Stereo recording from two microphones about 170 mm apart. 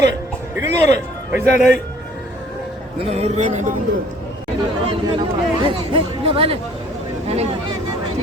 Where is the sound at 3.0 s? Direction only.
40° right (ahead or behind).